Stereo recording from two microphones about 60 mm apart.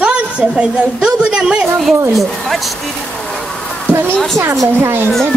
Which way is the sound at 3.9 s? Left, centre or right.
Right.